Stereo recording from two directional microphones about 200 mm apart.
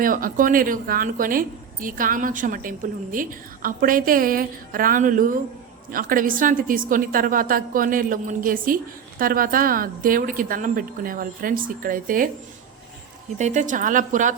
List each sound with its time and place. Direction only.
0.0 s a woman's voice: 45° right (ahead or behind)
13.4 s a woman's voice: 35° right (ahead or behind)